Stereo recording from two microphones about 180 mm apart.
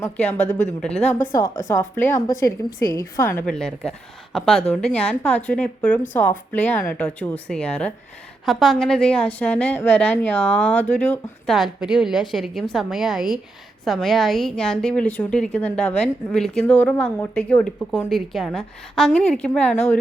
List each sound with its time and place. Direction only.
0.8 s a woman's voice: 5° left (ahead or behind)
1.0 s a woman's voice: 45° left (ahead or behind)
1.4 s a woman's voice: 15° left (ahead or behind)